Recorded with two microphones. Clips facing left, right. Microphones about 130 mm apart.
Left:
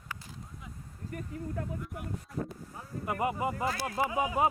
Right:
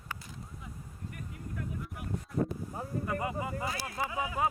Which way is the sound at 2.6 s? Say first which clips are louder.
Right 6 dB; 15° right (ahead or behind).